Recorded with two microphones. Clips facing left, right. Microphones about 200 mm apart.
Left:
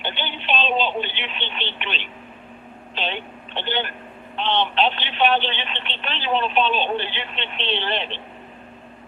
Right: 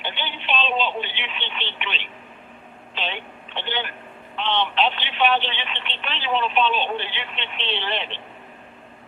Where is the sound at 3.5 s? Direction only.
40° left (ahead or behind).